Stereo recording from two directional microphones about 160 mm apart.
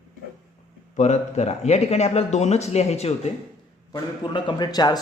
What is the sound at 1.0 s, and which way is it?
Speech, 45° left (ahead or behind).